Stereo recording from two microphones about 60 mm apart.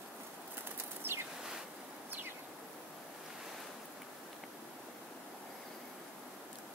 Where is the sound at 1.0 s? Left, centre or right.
Right.